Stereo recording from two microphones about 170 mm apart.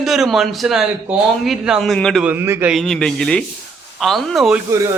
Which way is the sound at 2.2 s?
15° right (ahead or behind).